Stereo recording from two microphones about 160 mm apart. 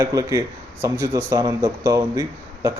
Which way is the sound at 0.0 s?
20° right (ahead or behind).